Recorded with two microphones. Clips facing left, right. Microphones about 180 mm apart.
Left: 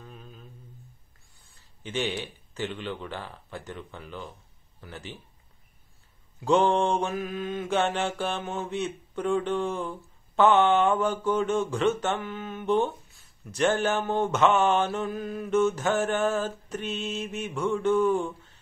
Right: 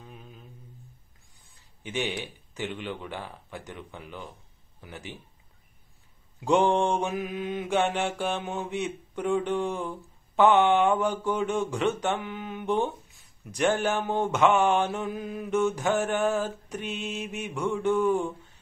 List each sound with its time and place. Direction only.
0.0 s humming: 15° right (ahead or behind)
1.5 s speech: 15° right (ahead or behind)
6.4 s mantra: 15° right (ahead or behind)